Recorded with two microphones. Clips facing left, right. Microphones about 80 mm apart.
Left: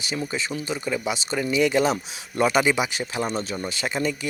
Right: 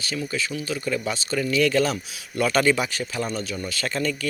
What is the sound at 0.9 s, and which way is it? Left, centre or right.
Speech, centre.